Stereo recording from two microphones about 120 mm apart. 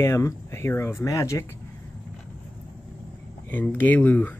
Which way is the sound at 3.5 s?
15° left (ahead or behind).